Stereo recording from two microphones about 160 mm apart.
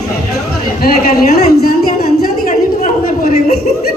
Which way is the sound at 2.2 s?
60° left (ahead or behind).